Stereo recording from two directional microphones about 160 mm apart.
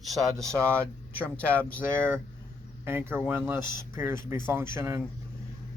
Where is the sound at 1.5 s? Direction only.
10° left (ahead or behind).